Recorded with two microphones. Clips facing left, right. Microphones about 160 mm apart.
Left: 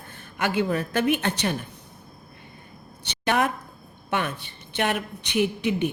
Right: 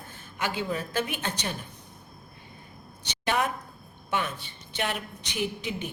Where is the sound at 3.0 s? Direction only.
60° left (ahead or behind).